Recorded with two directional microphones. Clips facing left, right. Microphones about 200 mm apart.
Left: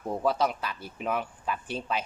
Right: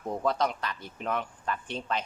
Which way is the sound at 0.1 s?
5° left (ahead or behind).